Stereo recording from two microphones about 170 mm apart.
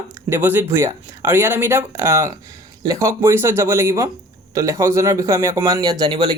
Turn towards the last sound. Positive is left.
turn(degrees=-25)  # may be behind; listen again after turning